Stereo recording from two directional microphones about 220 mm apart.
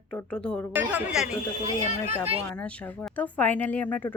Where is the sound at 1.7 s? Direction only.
25° right (ahead or behind).